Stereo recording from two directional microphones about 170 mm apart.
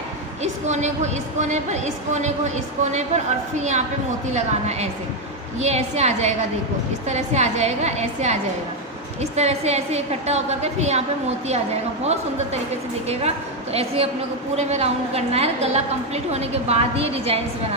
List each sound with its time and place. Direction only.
0.4 s a woman's voice: 45° right (ahead or behind)
4.3 s a woman's voice: 40° right (ahead or behind)